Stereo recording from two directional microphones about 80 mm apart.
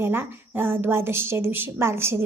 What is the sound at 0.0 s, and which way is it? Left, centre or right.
Speech, right.